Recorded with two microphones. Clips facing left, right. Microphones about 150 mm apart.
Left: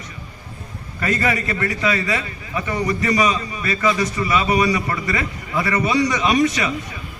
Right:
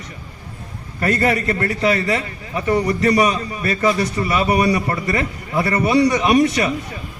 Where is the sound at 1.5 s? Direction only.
35° right (ahead or behind); by 4.6 s 50° right (ahead or behind).